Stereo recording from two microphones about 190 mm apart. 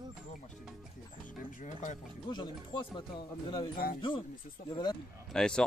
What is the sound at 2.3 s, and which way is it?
Speech, 25° left (ahead or behind).